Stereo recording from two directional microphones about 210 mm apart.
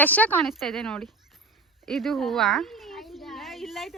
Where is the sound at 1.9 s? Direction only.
Centre (ahead or behind).